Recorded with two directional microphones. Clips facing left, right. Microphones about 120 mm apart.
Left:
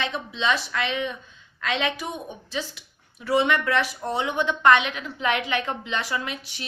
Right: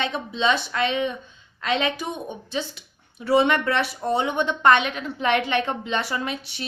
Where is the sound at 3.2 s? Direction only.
30° right (ahead or behind).